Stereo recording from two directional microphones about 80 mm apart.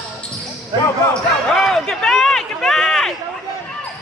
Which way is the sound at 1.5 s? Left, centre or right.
Centre.